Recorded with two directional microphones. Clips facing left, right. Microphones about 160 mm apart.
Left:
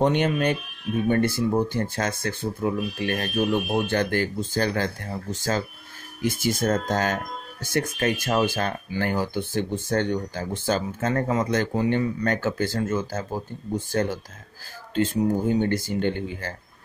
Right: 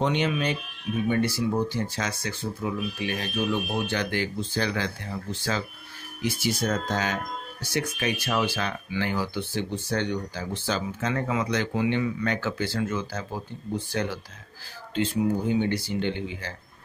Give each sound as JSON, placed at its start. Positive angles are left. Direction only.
{"t": 0.0, "sound": "speech", "side_deg": 50}